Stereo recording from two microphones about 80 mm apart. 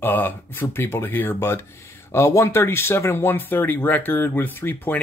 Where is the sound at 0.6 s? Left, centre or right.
Left.